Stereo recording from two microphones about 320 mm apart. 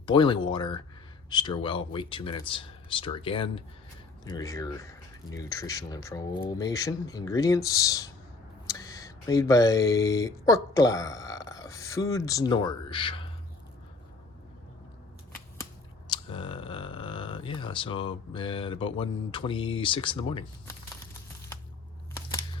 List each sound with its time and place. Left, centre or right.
0.0 s speech: centre
16.0 s a sound: centre
18.9 s speech: centre